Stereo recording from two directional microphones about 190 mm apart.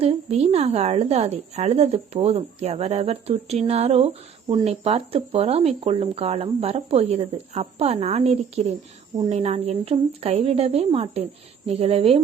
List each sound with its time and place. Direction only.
0.0 s a woman's voice: 30° right (ahead or behind)